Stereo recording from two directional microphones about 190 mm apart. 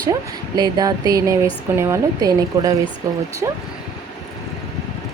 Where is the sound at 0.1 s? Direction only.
20° right (ahead or behind).